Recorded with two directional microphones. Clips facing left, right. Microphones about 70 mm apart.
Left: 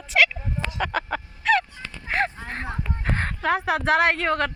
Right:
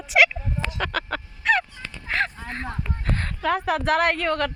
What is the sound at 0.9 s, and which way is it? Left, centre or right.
Fowl, left.